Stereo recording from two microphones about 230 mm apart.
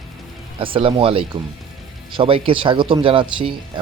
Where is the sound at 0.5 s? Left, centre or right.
Right.